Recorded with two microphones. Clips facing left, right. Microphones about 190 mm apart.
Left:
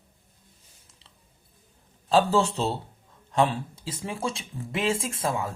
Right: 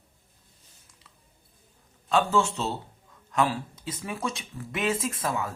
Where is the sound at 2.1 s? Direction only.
35° left (ahead or behind).